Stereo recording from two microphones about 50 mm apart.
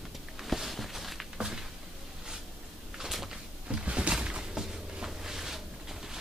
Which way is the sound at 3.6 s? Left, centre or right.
Centre.